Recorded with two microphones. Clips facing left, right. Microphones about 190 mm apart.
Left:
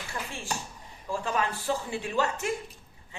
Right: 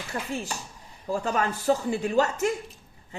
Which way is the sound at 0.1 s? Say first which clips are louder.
Right 4 dB; 40° right (ahead or behind).